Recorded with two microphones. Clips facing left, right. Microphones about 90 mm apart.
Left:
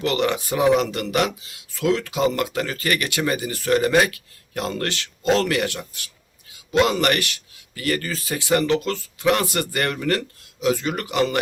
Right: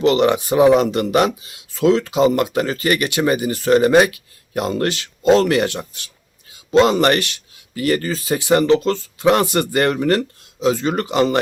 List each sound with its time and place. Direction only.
0.0 s speech: 20° right (ahead or behind)